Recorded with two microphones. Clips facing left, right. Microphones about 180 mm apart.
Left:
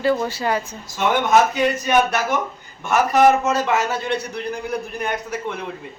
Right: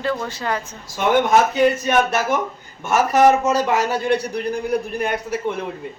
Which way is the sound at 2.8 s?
5° right (ahead or behind).